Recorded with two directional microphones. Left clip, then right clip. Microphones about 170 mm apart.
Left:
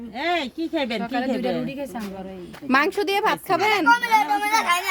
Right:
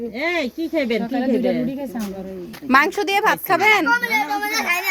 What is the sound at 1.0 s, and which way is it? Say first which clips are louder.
Speech: right 2 dB; 50° left (ahead or behind).